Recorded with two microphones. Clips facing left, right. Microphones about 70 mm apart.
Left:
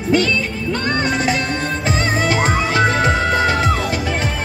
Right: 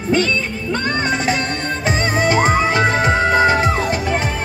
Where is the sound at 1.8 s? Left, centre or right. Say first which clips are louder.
Right 3 dB; centre.